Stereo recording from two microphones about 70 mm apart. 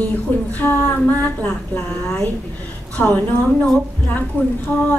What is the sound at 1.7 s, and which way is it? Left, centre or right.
A woman's voice, centre.